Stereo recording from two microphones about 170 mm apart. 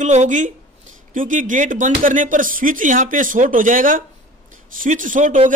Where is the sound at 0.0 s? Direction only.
45° right (ahead or behind).